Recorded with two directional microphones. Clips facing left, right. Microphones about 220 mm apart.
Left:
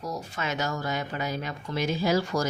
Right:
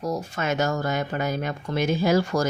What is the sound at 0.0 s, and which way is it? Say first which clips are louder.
Speech: right 6 dB; 50° right (ahead or behind).